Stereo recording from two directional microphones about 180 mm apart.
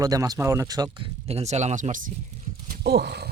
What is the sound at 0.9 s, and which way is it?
Speech, 30° right (ahead or behind).